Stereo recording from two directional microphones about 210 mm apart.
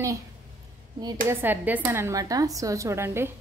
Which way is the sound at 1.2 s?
10° right (ahead or behind).